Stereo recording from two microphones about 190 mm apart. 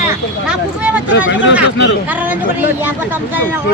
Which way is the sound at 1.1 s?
80° left.